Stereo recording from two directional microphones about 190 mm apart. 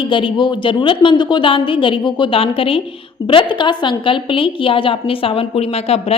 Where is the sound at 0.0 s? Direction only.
25° left (ahead or behind).